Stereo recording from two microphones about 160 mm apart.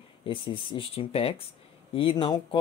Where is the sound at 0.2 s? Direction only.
30° left (ahead or behind).